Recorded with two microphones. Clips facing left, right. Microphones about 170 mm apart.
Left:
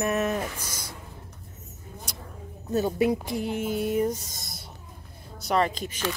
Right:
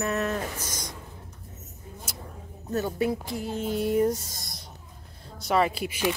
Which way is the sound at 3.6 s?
5° left (ahead or behind).